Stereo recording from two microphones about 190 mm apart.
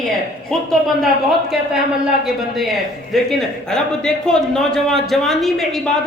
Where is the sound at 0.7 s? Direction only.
Centre (ahead or behind).